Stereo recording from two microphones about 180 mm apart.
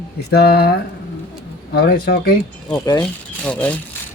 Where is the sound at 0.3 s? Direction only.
60° left (ahead or behind).